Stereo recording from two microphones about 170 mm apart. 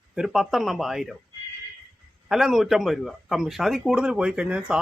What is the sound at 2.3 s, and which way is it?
A man's voice, centre (ahead or behind).